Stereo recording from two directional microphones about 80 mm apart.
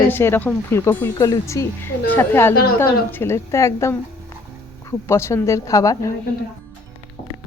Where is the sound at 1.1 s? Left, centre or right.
Left.